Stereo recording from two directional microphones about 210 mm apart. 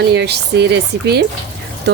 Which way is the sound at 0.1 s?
50° right (ahead or behind).